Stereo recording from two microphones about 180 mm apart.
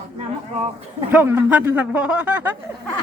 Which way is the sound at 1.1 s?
10° right (ahead or behind).